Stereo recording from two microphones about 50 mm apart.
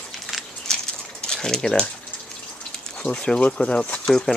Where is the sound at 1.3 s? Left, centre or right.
Centre.